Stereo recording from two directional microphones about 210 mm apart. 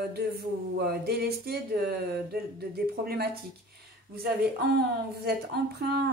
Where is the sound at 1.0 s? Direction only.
50° right (ahead or behind).